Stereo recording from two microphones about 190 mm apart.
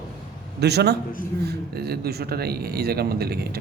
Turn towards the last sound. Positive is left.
turn(degrees=-55)  # may be behind; listen again after turning